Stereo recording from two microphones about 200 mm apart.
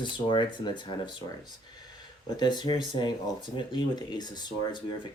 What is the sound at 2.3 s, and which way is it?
Speech, 20° left (ahead or behind).